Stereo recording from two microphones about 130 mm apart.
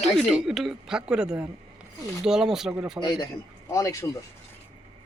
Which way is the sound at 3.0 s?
35° left (ahead or behind).